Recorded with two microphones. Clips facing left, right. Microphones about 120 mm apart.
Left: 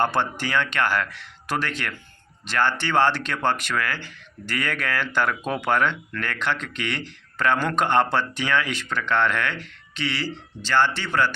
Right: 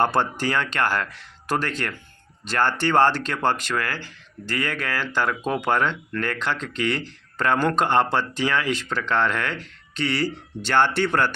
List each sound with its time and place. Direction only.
0.1 s speech: 40° right (ahead or behind)